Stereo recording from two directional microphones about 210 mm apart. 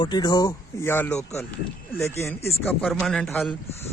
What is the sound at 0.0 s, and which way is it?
Speech, 20° left (ahead or behind).